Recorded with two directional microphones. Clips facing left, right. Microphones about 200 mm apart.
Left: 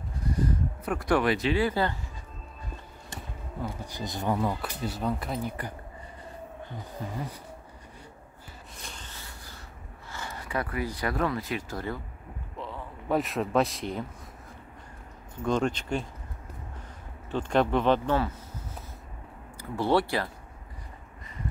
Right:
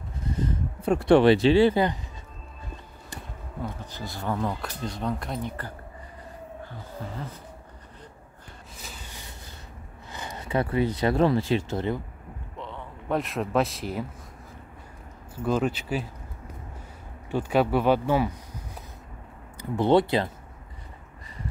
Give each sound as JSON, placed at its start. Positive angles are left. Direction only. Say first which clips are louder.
{"t": 0.3, "sound": "a sound", "louder": "left 1 dB", "side_deg": -25}
{"t": 3.6, "sound": "speech", "louder": "even", "side_deg": 15}
{"t": 4.4, "sound": "speech", "louder": "even", "side_deg": 5}
{"t": 7.0, "sound": "speech", "louder": "left 1 dB", "side_deg": 15}
{"t": 8.7, "sound": "a sound", "louder": "right 2 dB", "side_deg": -5}
{"t": 10.1, "sound": "speech", "louder": "right 5 dB", "side_deg": -20}
{"t": 12.5, "sound": "speech", "louder": "even", "side_deg": 0}
{"t": 15.3, "sound": "speech", "louder": "right 1 dB", "side_deg": -5}
{"t": 17.3, "sound": "speech", "louder": "right 2 dB", "side_deg": -10}
{"t": 19.7, "sound": "speech", "louder": "right 5 dB", "side_deg": -20}